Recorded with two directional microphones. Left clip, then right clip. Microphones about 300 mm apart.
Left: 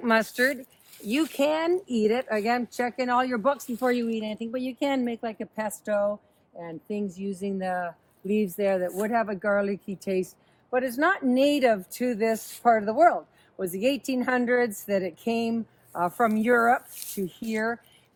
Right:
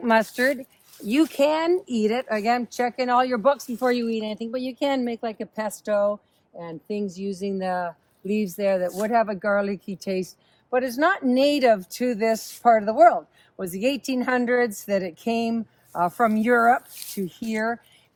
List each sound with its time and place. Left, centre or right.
0.0 s speech: centre
9.7 s speech: right
10.7 s speech: centre